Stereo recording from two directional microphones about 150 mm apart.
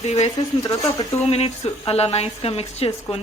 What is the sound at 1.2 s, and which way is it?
A woman's voice, 45° left (ahead or behind).